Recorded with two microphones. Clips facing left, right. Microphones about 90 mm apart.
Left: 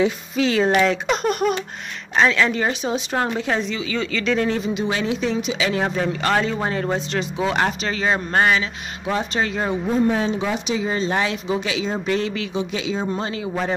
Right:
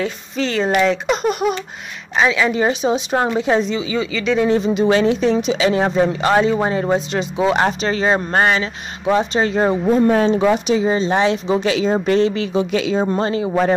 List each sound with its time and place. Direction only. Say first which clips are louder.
0.0 s speech: left 2 dB; 5° left (ahead or behind); by 4.0 s 20° right (ahead or behind)
4.0 s speech: right 2 dB; centre (ahead or behind)
4.6 s speech: right 6 dB; 30° right (ahead or behind)
4.8 s speech: right 10 dB; 40° right (ahead or behind)
5.7 s speech: right 7 dB; 25° right (ahead or behind)
7.8 s speech: right 5 dB; 35° right (ahead or behind)
9.5 s speech: right 7 dB; 35° right (ahead or behind)
9.9 s speech: right 4 dB; 55° right (ahead or behind)
10.9 s speech: right 4 dB; 25° right (ahead or behind)
12.7 s speech: right 8 dB; 55° right (ahead or behind)
13.0 s speech: right 7 dB; 40° right (ahead or behind)